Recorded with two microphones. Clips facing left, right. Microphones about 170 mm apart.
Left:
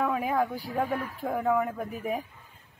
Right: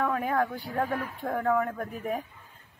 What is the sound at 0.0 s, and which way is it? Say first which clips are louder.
A woman's voice: even; 5° left (ahead or behind).